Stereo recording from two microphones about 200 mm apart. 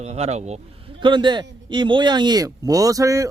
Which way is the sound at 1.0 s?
25° right (ahead or behind).